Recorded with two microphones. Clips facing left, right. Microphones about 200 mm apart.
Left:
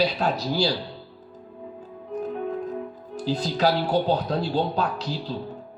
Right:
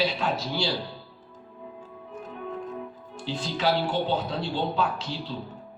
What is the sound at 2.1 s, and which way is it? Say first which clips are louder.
Music: left 11 dB; 40° left (ahead or behind).